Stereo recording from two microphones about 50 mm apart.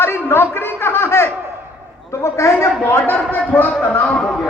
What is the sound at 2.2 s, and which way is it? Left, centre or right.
Speech, left.